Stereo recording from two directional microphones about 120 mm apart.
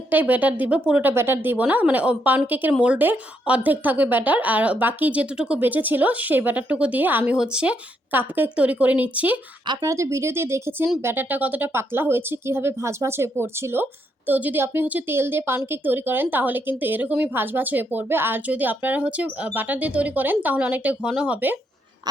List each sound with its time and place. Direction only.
0.1 s a woman's voice: 15° right (ahead or behind)
9.6 s a woman's voice: 25° right (ahead or behind)